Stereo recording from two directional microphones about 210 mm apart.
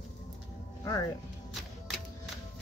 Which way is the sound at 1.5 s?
Centre (ahead or behind).